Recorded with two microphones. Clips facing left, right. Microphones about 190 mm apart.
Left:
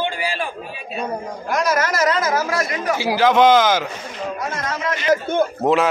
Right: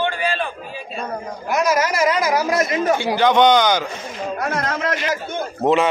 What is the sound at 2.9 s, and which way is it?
Speech, 5° left (ahead or behind).